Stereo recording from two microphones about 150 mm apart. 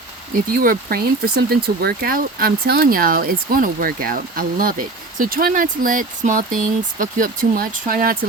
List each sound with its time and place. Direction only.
0.5 s speech: 75° right (ahead or behind)